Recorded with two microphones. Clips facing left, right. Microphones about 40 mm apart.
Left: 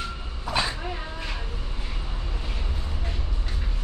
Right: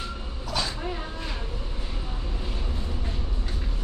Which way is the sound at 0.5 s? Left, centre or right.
Left.